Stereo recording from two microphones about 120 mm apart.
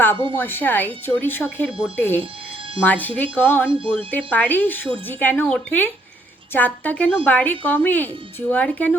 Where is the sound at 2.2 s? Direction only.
45° right (ahead or behind).